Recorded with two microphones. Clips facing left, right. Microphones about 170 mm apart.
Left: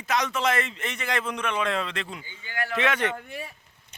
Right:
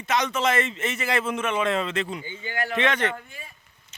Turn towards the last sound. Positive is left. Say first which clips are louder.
# left 4 dB
turn(degrees=70)  # may be behind; listen again after turning